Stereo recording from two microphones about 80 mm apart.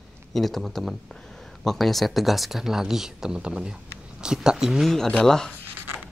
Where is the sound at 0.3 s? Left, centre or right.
Centre.